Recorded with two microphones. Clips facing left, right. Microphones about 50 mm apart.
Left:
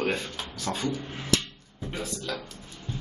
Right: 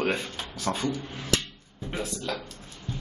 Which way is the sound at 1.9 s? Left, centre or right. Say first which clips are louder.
Right 2 dB; centre.